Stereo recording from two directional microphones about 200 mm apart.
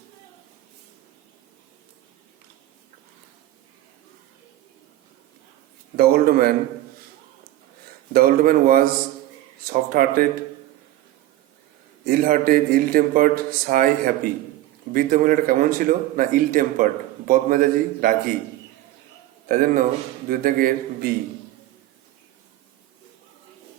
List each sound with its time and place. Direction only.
6.0 s a man's voice: 50° right (ahead or behind)
8.1 s a man's voice: 45° right (ahead or behind)
12.0 s a man's voice: 45° right (ahead or behind)
14.9 s a man's voice: 45° right (ahead or behind)
19.5 s a man's voice: 45° right (ahead or behind)